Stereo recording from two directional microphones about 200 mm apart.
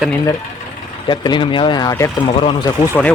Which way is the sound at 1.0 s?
25° left (ahead or behind).